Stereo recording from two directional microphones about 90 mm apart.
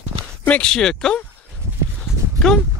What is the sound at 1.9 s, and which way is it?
Clip-clop, 5° left (ahead or behind).